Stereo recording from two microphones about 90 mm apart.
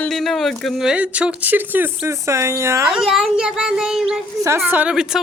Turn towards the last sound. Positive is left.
turn(degrees=-5)  # may be behind; listen again after turning